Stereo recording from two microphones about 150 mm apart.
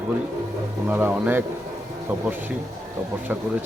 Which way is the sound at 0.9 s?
10° right (ahead or behind).